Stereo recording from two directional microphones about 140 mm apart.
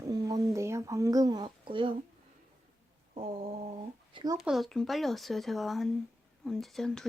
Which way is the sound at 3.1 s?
45° right (ahead or behind).